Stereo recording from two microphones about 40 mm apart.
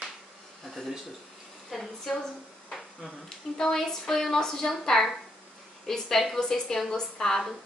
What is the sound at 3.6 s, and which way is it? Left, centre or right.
A woman's voice, centre.